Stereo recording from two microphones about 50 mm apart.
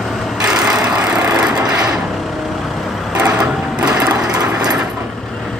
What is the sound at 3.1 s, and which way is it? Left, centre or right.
Sewing machine, right.